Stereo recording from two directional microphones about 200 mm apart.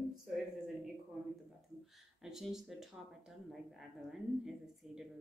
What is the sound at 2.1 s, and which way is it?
Speech, centre (ahead or behind).